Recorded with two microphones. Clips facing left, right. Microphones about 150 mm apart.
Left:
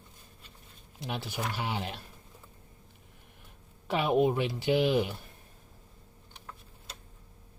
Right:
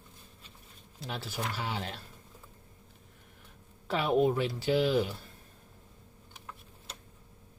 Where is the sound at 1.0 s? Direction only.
15° left (ahead or behind).